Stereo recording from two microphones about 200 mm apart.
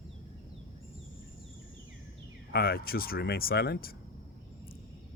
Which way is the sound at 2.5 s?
50° left (ahead or behind).